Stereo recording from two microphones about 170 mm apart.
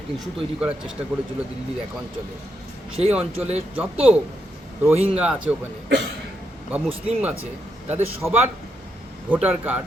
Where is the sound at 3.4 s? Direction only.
40° right (ahead or behind).